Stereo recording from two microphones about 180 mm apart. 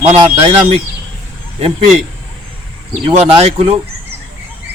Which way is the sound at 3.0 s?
35° right (ahead or behind).